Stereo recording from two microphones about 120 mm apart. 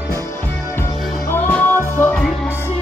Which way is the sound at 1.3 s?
15° left (ahead or behind).